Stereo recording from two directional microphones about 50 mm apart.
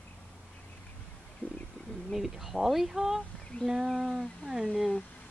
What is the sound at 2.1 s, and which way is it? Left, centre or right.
Speech, centre.